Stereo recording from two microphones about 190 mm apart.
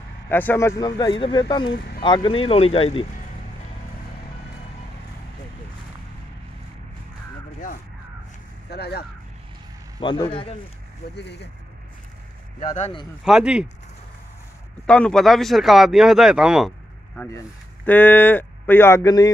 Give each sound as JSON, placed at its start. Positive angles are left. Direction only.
{"t": 0.3, "sound": "speech", "side_deg": 10}
{"t": 8.6, "sound": "a sound", "side_deg": 55}
{"t": 9.9, "sound": "speech", "side_deg": 25}
{"t": 11.1, "sound": "speech", "side_deg": 65}
{"t": 13.2, "sound": "speech", "side_deg": -5}
{"t": 14.9, "sound": "speech", "side_deg": 5}
{"t": 17.8, "sound": "speech", "side_deg": 10}